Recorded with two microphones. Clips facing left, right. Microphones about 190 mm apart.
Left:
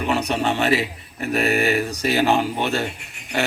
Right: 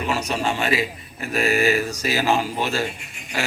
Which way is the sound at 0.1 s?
60° left (ahead or behind).